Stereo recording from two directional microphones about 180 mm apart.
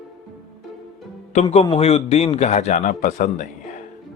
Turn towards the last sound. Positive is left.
turn(degrees=45)  # may be behind; listen again after turning